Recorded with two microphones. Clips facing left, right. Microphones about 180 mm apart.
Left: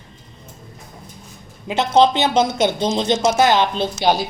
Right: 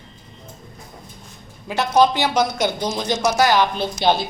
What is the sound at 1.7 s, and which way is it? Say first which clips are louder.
Speech: left 2 dB; 20° left (ahead or behind).